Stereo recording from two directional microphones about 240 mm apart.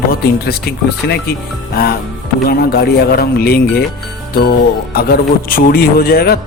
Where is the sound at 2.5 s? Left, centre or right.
Left.